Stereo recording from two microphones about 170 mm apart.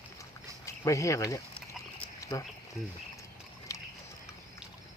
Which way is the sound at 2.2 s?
20° left (ahead or behind).